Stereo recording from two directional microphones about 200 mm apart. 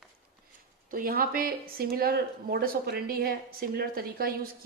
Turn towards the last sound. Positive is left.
turn(degrees=-50)  # may be behind; listen again after turning